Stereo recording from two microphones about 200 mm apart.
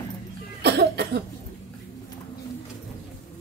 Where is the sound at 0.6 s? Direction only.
55° right (ahead or behind).